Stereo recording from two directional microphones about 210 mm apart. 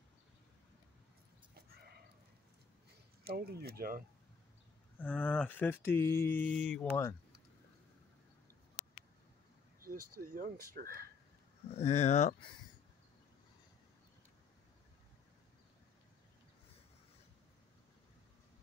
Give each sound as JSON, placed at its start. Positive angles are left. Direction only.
{"t": 3.3, "sound": "speech", "side_deg": -45}
{"t": 4.9, "sound": "speech", "side_deg": 5}
{"t": 9.9, "sound": "speech", "side_deg": -90}
{"t": 10.2, "sound": "speech", "side_deg": -45}
{"t": 11.7, "sound": "speech", "side_deg": 30}